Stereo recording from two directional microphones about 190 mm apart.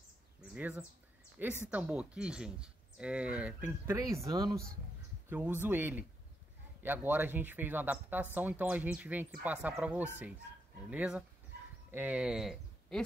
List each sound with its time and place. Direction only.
0.6 s speech: 10° right (ahead or behind)
5.3 s speech: 10° right (ahead or behind)